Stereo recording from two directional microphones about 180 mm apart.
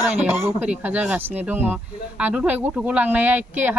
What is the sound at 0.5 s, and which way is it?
Speech, 10° right (ahead or behind).